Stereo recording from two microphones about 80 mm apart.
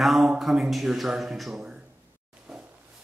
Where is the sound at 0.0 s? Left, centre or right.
Centre.